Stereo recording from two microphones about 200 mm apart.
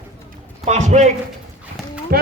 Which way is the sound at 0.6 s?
35° right (ahead or behind).